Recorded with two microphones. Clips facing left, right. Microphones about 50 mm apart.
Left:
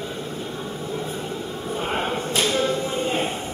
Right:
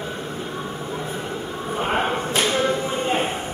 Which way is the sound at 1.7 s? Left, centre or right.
Centre.